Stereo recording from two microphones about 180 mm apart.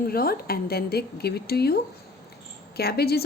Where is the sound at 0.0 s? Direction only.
55° left (ahead or behind).